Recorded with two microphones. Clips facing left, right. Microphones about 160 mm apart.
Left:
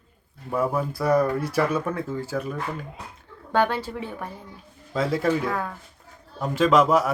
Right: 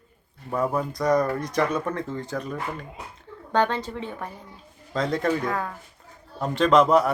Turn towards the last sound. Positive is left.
turn(degrees=0)  # may be behind; listen again after turning